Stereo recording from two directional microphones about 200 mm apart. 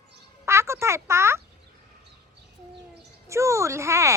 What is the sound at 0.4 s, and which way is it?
Speech, 15° right (ahead or behind).